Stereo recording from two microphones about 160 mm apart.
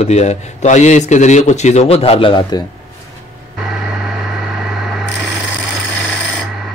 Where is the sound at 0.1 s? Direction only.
45° left (ahead or behind).